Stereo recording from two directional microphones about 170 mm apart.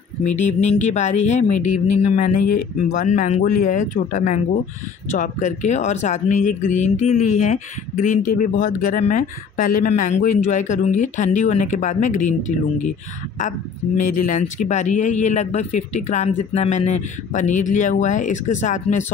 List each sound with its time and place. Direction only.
0.4 s speech: 45° left (ahead or behind)
3.4 s speech: 55° left (ahead or behind)
13.9 s speech: 50° left (ahead or behind)